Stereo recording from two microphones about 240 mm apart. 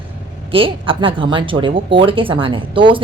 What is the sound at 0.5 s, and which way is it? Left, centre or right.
A woman's voice, right.